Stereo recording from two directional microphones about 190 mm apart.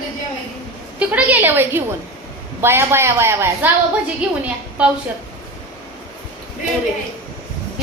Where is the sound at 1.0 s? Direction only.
10° right (ahead or behind).